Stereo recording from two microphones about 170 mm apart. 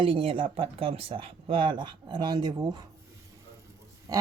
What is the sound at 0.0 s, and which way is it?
Speech, 30° right (ahead or behind).